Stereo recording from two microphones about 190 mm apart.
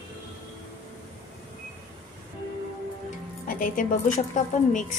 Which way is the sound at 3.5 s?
45° left (ahead or behind).